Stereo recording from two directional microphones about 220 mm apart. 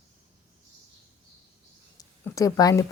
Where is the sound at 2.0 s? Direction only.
15° left (ahead or behind).